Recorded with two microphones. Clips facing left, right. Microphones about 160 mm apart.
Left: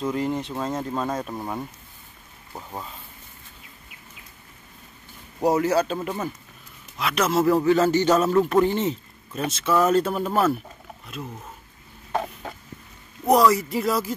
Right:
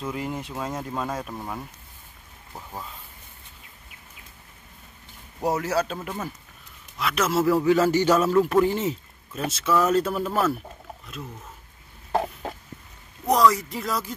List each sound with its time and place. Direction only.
0.0 s speech: 5° right (ahead or behind)
1.3 s speech: 10° left (ahead or behind)
5.4 s a man's voice: centre (ahead or behind)
12.1 s a sound: 30° right (ahead or behind)
13.3 s speech: 5° left (ahead or behind)